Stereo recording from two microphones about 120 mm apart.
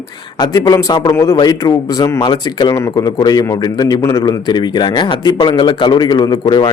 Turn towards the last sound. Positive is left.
turn(degrees=40)  # may be behind; listen again after turning